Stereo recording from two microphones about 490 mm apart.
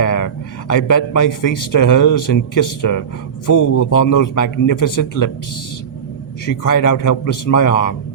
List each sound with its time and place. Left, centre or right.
0.0 s a sound: left
0.7 s a man's voice: left
6.6 s a man's voice: left